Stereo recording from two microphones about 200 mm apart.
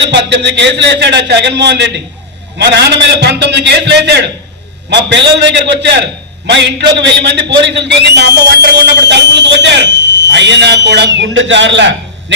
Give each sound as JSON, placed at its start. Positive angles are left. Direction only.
{"t": 0.1, "sound": "speech", "side_deg": -60}